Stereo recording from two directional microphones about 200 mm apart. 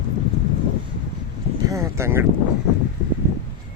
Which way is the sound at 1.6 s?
15° right (ahead or behind).